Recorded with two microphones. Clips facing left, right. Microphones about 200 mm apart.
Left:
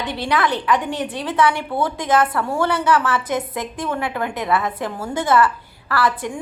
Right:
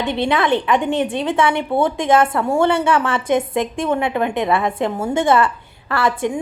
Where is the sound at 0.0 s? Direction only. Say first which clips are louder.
Right 3 dB; 25° right (ahead or behind).